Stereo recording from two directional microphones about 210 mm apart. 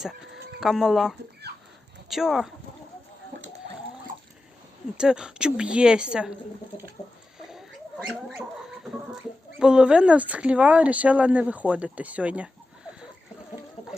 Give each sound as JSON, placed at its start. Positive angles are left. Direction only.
{"t": 0.6, "sound": "speech", "side_deg": 0}
{"t": 1.5, "sound": "a sound", "side_deg": -50}
{"t": 2.0, "sound": "speech", "side_deg": 0}
{"t": 4.9, "sound": "speech", "side_deg": -5}
{"t": 7.4, "sound": "pig", "side_deg": 0}
{"t": 9.6, "sound": "speech", "side_deg": -5}